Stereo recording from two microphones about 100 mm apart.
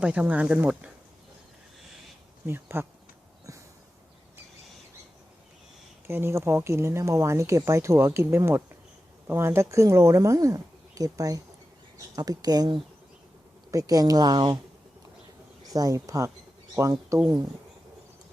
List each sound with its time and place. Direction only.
0.0 s a woman's voice: 15° right (ahead or behind)
2.5 s speech: 25° right (ahead or behind)
6.1 s speech: 25° right (ahead or behind); by 14.6 s 45° right (ahead or behind)
15.6 s speech: 40° right (ahead or behind)